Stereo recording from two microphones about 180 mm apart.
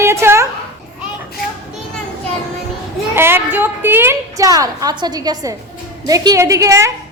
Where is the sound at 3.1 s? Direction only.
10° right (ahead or behind).